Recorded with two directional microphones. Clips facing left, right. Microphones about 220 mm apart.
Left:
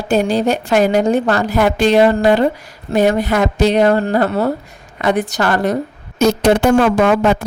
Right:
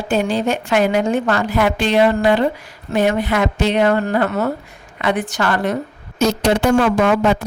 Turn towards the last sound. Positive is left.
turn(degrees=50)  # may be behind; listen again after turning